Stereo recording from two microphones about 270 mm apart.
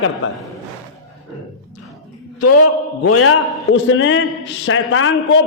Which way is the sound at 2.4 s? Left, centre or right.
Left.